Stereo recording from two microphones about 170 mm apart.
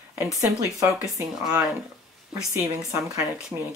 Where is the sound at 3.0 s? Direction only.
10° right (ahead or behind).